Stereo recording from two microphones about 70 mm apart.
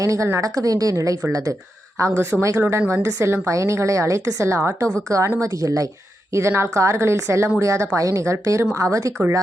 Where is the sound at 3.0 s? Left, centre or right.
Right.